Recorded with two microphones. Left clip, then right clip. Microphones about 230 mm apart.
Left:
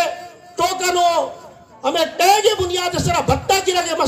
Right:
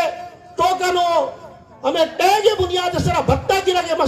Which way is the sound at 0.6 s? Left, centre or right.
Left.